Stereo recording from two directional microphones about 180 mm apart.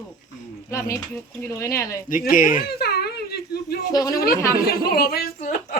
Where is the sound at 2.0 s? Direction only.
50° left (ahead or behind).